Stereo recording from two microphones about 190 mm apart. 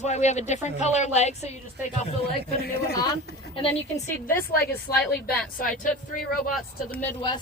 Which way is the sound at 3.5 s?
30° left (ahead or behind).